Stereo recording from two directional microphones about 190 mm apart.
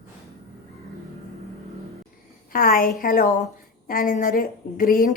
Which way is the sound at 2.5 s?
50° left (ahead or behind).